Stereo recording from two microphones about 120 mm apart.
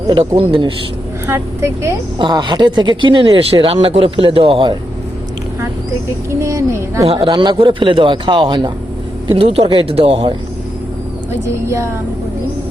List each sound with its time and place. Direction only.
0.1 s speech: 50° right (ahead or behind)
1.3 s speech: 20° right (ahead or behind)
2.1 s speech: 40° right (ahead or behind)
6.4 s speech: 25° right (ahead or behind)
7.1 s a man's voice: 45° right (ahead or behind)
11.4 s speech: 25° right (ahead or behind)